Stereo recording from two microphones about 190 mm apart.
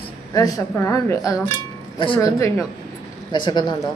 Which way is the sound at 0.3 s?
20° left (ahead or behind).